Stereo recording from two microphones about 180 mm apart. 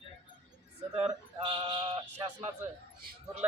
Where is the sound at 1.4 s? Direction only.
25° right (ahead or behind).